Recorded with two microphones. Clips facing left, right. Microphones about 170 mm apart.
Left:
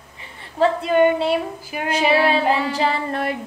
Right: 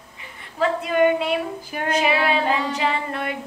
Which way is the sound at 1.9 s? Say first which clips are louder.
Left 3 dB; 35° left (ahead or behind).